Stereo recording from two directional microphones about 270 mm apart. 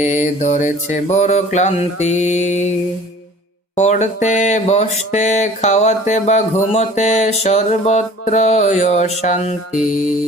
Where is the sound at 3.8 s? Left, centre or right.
Left.